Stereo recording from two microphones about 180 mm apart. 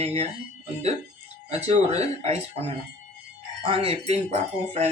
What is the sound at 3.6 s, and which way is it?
Speech, 30° right (ahead or behind).